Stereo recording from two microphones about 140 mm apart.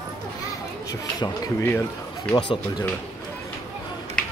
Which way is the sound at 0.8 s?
25° left (ahead or behind).